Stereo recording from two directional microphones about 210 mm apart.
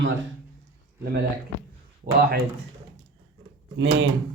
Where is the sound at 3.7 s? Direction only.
65° right (ahead or behind).